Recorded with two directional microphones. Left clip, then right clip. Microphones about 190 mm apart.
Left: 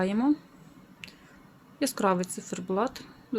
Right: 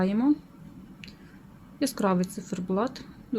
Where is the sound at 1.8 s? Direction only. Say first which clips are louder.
Even; 10° left (ahead or behind).